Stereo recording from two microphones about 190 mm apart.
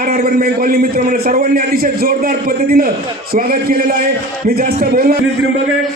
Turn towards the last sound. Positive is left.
turn(degrees=-50)  # may be behind; listen again after turning